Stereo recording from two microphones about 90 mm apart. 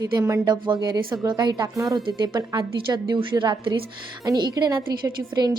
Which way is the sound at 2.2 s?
55° right (ahead or behind).